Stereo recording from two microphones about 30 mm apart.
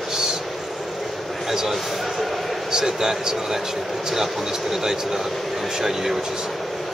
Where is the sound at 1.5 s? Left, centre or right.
Centre.